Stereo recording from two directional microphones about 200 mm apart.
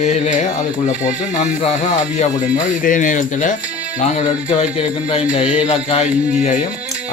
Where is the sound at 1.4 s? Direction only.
35° left (ahead or behind).